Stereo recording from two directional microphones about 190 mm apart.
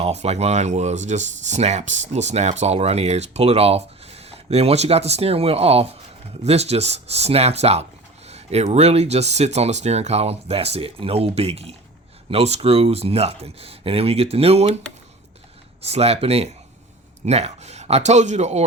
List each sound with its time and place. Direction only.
0.0 s speech: 35° right (ahead or behind)
15.8 s speech: 35° right (ahead or behind)